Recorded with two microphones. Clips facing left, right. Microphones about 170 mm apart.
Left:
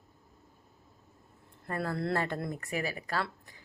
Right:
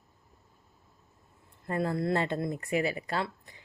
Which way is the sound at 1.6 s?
20° right (ahead or behind).